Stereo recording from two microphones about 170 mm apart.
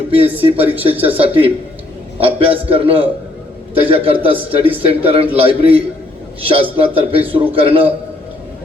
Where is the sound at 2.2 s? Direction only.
35° right (ahead or behind).